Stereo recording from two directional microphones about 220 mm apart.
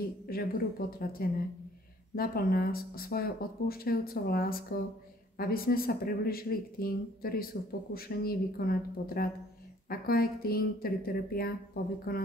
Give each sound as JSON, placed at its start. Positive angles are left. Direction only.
{"t": 0.3, "sound": "speech", "side_deg": 45}